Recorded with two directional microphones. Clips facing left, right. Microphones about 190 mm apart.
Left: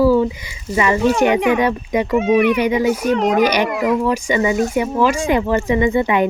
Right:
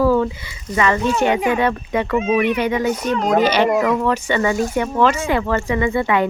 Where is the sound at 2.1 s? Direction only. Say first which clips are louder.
Left 4 dB; 70° left (ahead or behind).